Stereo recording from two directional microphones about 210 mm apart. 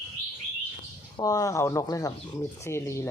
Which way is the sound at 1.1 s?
15° left (ahead or behind).